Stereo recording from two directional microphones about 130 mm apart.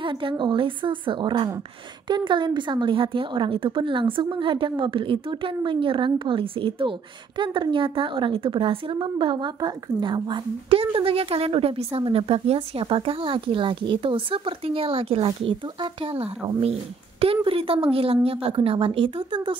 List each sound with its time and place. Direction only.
0.0 s a woman's voice: 40° right (ahead or behind)